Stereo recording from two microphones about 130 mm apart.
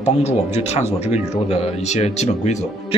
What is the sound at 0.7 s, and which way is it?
Speech, 60° left (ahead or behind).